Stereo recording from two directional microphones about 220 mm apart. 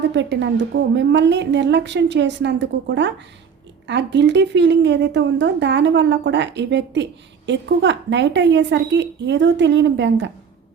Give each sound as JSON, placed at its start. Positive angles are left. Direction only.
{"t": 0.1, "sound": "a woman's voice", "side_deg": -55}